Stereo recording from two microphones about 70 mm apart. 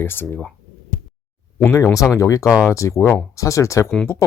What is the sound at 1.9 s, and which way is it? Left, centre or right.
Speech, left.